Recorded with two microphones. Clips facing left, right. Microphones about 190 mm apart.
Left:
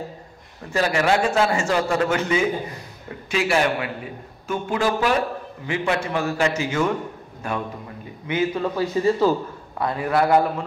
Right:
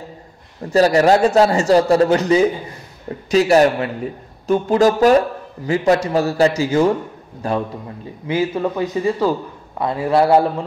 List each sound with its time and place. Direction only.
0.7 s a man's voice: 40° right (ahead or behind)